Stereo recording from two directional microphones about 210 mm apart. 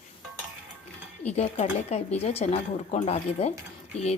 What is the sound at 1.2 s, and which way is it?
Speech, 30° left (ahead or behind).